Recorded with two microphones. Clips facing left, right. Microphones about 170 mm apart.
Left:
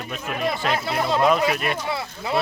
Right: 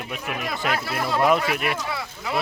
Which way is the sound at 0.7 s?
25° left (ahead or behind).